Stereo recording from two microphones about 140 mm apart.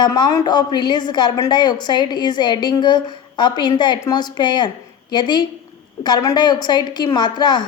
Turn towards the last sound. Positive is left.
turn(degrees=30)  # may be behind; listen again after turning